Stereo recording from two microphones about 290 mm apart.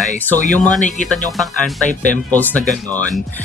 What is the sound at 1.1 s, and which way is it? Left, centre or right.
Speech, centre.